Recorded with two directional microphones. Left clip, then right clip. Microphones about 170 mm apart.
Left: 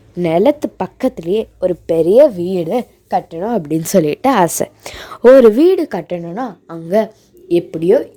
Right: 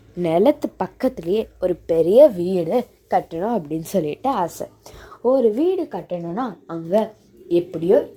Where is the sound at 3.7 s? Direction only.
40° left (ahead or behind).